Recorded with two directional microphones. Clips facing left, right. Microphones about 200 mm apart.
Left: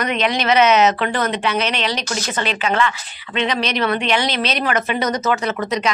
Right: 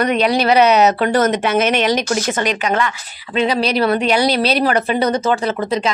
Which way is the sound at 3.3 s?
35° right (ahead or behind).